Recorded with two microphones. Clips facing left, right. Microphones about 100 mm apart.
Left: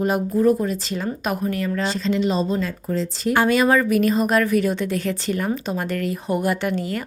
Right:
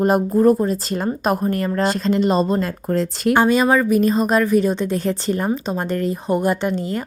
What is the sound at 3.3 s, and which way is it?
Speech, 20° right (ahead or behind).